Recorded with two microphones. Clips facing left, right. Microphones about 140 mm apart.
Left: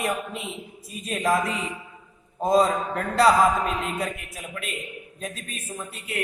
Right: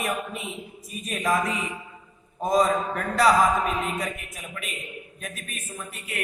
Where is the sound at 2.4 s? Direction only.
25° left (ahead or behind).